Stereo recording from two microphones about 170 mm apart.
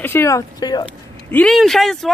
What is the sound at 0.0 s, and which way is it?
Speech, 15° left (ahead or behind).